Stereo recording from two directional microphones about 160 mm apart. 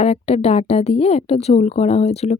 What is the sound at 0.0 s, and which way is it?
A woman's voice, 40° left (ahead or behind).